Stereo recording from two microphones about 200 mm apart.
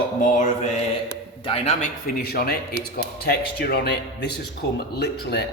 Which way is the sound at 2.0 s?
45° left (ahead or behind).